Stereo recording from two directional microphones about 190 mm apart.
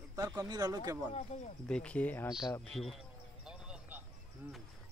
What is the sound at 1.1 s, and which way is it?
Speech, 35° left (ahead or behind).